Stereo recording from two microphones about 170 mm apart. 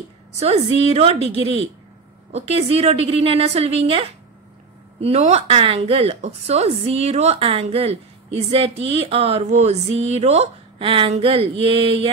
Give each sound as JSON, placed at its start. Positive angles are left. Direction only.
{"t": 0.4, "sound": "speech", "side_deg": -40}